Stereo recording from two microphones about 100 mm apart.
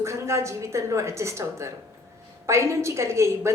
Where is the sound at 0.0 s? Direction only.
30° right (ahead or behind).